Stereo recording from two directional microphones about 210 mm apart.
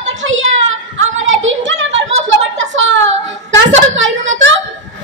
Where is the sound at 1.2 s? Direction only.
65° right (ahead or behind).